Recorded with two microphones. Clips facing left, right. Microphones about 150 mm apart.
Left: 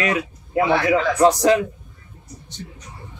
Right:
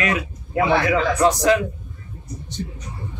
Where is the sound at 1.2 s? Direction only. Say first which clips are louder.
Left 2 dB; 35° left (ahead or behind).